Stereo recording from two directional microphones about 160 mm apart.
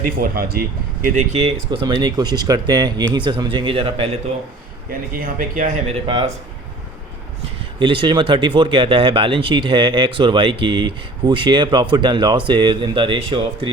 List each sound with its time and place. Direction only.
0.0 s speech: 65° right (ahead or behind); by 1.5 s 45° right (ahead or behind)
1.7 s speech: 25° right (ahead or behind)
4.9 s speech: 65° right (ahead or behind)
6.1 s speech: 35° right (ahead or behind)
7.8 s speech: 30° right (ahead or behind)